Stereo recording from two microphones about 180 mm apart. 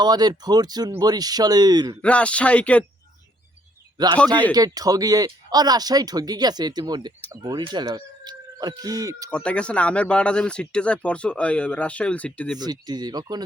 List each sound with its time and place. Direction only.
0.0 s speech: 25° right (ahead or behind)
2.0 s speech: 5° left (ahead or behind)
3.9 s a man's voice: 20° right (ahead or behind)
9.3 s speech: 5° left (ahead or behind)
12.5 s speech: 20° right (ahead or behind)